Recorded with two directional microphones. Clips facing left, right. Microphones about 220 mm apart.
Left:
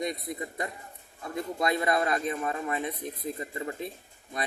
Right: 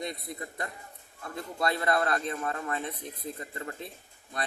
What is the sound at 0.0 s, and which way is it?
Speech, 20° left (ahead or behind).